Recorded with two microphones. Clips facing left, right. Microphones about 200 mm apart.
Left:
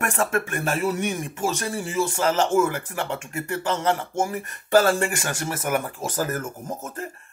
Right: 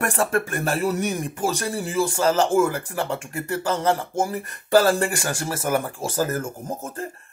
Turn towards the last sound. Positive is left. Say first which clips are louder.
# right 2 dB
turn(degrees=-30)  # may be behind; listen again after turning